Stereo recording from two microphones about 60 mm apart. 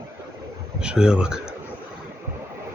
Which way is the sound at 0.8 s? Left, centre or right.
Centre.